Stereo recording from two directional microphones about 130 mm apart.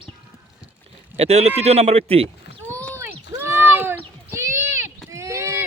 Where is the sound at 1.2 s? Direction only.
55° right (ahead or behind).